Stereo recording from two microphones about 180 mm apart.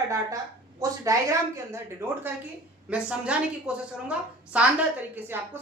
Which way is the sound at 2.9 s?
5° right (ahead or behind).